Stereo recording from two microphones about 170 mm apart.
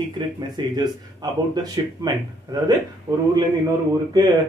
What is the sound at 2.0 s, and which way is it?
Speech, 20° right (ahead or behind).